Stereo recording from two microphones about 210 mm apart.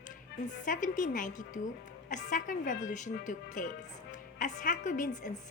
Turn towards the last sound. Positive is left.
turn(degrees=35)  # may be behind; listen again after turning